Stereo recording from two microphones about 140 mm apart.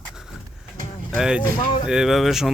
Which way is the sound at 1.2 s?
5° right (ahead or behind).